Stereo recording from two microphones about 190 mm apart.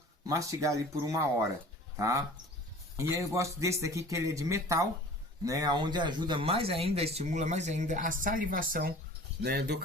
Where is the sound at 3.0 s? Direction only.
15° right (ahead or behind).